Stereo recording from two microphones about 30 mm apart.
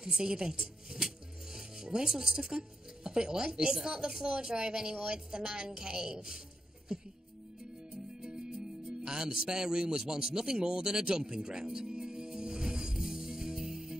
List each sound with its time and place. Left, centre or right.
0.0 s speech: right
9.0 s music: right